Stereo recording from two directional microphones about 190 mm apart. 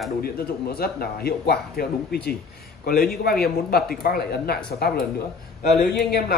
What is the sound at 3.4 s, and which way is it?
A man's voice, 55° left (ahead or behind).